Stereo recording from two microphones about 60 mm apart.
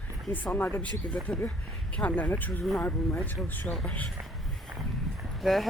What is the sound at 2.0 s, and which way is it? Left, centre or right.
Speech, left.